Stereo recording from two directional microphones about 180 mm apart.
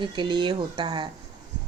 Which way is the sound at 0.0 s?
25° right (ahead or behind).